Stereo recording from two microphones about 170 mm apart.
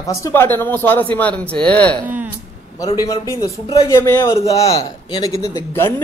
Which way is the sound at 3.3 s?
20° left (ahead or behind).